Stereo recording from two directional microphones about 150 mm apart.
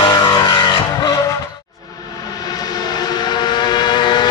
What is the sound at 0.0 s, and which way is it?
Vehicle, 30° left (ahead or behind).